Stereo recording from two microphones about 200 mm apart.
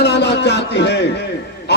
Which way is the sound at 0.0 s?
60° left (ahead or behind).